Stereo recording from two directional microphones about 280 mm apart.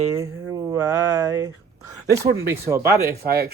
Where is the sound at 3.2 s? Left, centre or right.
Right.